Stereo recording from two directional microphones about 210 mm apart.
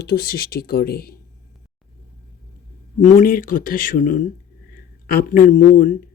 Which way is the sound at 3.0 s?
40° left (ahead or behind).